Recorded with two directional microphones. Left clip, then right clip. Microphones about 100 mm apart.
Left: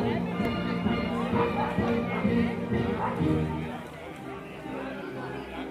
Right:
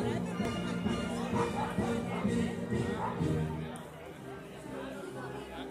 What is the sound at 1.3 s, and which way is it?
Music, 10° right (ahead or behind).